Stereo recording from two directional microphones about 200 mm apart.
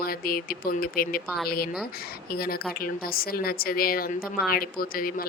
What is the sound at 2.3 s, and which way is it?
Speech, 50° left (ahead or behind).